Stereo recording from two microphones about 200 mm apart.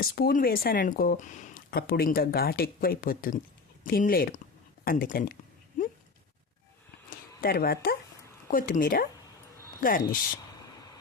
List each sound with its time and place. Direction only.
0.0 s speech: 50° left (ahead or behind)
4.9 s a sound: 45° left (ahead or behind)
7.1 s speech: 45° left (ahead or behind)